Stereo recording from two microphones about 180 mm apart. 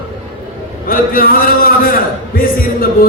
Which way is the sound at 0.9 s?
55° left (ahead or behind).